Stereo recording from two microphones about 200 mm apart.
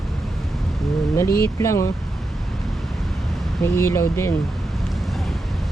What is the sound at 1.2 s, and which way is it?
Speech, 50° left (ahead or behind).